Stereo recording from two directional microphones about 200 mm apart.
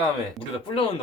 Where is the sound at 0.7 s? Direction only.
25° left (ahead or behind).